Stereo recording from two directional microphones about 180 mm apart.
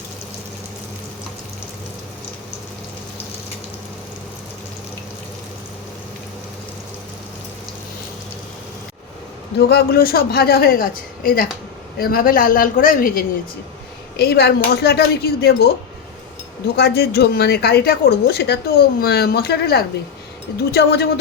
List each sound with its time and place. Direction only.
9.6 s a man's voice: 60° left (ahead or behind)
14.2 s speech: 65° left (ahead or behind)
16.7 s speech: 65° left (ahead or behind)